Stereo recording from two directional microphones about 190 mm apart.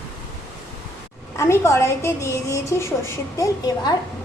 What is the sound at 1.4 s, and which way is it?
A woman's voice, 15° left (ahead or behind).